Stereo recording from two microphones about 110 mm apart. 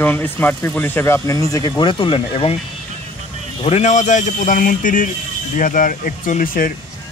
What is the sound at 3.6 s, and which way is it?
Speech, 85° left.